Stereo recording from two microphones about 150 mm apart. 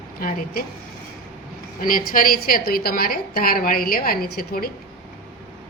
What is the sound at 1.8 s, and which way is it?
A woman's voice, 70° left (ahead or behind).